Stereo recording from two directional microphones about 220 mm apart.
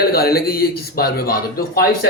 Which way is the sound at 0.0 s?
45° left (ahead or behind).